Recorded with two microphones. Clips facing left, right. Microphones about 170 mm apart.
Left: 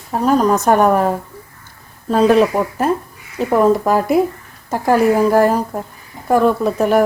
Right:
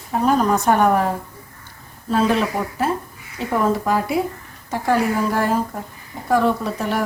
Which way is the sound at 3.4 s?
40° left (ahead or behind).